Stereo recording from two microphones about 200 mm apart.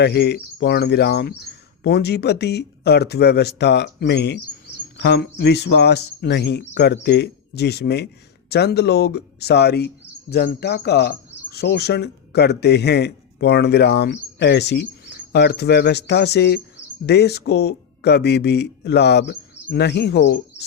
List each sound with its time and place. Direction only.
0.0 s speech: 55° left (ahead or behind)